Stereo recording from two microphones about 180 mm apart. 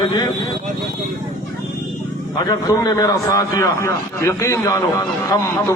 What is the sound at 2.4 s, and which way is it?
A man's voice, 25° left (ahead or behind).